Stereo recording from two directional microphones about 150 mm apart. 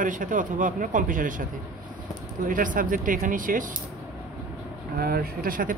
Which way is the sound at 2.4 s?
60° right (ahead or behind).